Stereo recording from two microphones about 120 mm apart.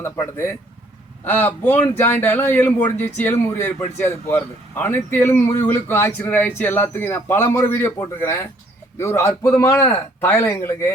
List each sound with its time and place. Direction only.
0.0 s a man's voice: 20° left (ahead or behind)